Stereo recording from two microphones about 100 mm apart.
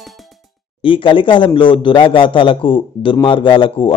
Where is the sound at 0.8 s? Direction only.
60° left (ahead or behind).